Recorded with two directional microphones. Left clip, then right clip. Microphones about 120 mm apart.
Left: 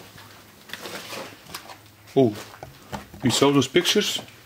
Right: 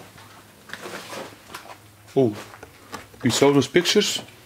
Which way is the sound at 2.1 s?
20° left (ahead or behind).